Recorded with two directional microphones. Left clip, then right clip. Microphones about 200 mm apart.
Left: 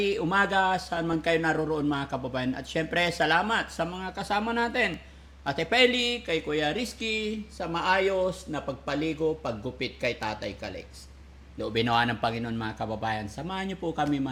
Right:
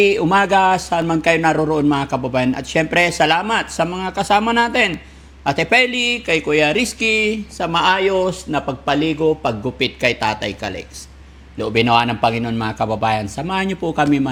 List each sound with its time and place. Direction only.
0.0 s speech: 20° right (ahead or behind)
11.9 s speech: 5° right (ahead or behind)
12.4 s speech: 20° right (ahead or behind)